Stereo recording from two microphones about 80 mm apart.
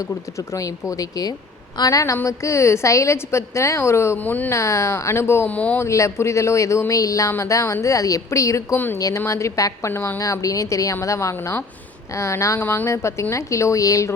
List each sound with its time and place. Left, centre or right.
0.0 s speech: left
4.2 s speech: left
4.5 s speech: left
5.5 s speech: centre
5.8 s speech: left
8.7 s speech: left
9.9 s speech: left
10.2 s speech: left